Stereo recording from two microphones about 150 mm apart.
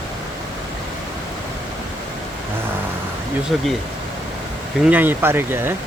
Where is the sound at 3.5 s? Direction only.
Centre (ahead or behind).